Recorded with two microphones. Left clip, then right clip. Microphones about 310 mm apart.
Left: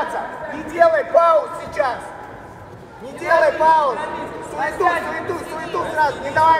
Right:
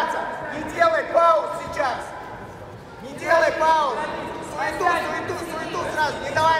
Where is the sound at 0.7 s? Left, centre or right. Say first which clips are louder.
Left 5 dB; centre.